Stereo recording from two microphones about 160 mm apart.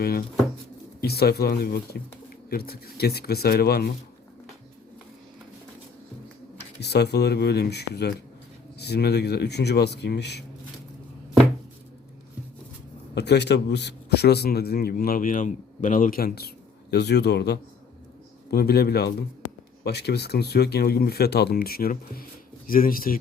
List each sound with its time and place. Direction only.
0.0 s a man's voice: 75° left (ahead or behind)
6.7 s speech: 90° left
13.1 s a man's voice: 90° left; by 16.5 s 75° left (ahead or behind)
16.9 s speech: 90° left
18.5 s speech: 75° left (ahead or behind)